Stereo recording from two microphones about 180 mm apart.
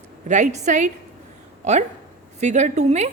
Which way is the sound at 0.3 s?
40° right (ahead or behind).